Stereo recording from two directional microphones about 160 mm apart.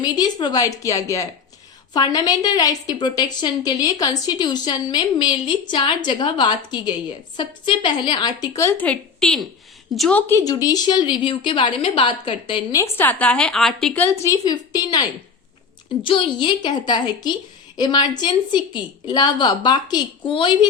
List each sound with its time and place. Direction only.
0.0 s a woman's voice: 25° left (ahead or behind)
12.8 s a woman's voice: 10° left (ahead or behind)
16.0 s a woman's voice: 30° left (ahead or behind)